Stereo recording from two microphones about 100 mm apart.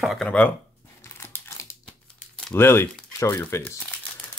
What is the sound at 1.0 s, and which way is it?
Crumpling, 25° left (ahead or behind).